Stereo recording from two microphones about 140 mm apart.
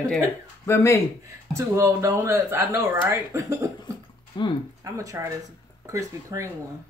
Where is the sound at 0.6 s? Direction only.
20° left (ahead or behind).